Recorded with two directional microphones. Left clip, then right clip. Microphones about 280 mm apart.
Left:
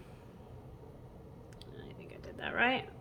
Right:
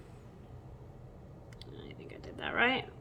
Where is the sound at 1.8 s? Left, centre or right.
Centre.